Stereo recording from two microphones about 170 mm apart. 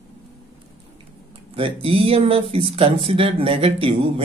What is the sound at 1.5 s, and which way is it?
Speech, 30° right (ahead or behind).